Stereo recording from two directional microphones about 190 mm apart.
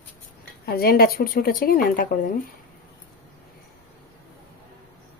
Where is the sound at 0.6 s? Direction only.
55° left (ahead or behind).